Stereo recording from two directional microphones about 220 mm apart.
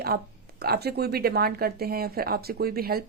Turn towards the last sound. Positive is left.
turn(degrees=-45)  # may be behind; listen again after turning